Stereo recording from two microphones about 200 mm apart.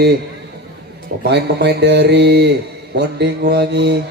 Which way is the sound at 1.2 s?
55° right (ahead or behind).